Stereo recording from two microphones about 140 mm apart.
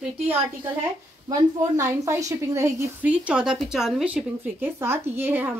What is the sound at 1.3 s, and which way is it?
A woman's voice, 20° right (ahead or behind).